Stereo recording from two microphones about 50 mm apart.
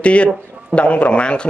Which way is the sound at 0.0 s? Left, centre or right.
Left.